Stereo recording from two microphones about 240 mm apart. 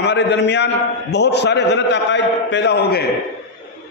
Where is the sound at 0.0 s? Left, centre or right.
Left.